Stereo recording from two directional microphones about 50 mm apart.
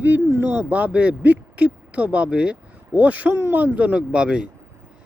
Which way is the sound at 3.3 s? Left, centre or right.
Right.